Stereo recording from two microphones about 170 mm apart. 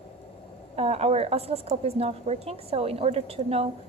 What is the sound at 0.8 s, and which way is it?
A woman's voice, 35° right (ahead or behind).